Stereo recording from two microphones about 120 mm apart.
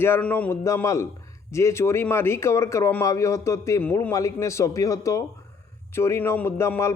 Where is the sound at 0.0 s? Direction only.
15° left (ahead or behind).